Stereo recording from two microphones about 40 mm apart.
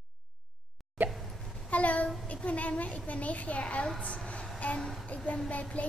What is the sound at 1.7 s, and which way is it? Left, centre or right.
Child singing, left.